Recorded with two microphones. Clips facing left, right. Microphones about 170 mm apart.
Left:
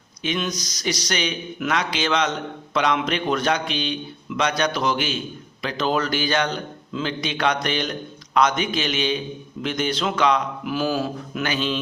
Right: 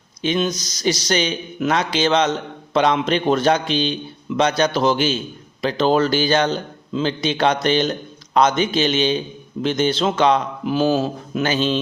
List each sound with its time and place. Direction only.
0.2 s a man's voice: 30° right (ahead or behind)